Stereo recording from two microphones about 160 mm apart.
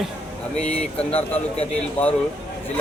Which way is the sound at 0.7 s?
5° left (ahead or behind).